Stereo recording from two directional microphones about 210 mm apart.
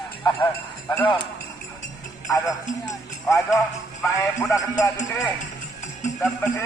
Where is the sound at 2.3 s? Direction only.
15° left (ahead or behind).